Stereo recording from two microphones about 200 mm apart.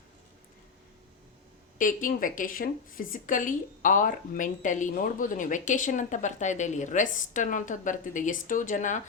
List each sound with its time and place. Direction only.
1.8 s speech: 40° left (ahead or behind)